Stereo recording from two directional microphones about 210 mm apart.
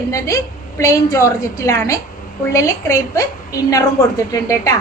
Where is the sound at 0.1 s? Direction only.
15° left (ahead or behind).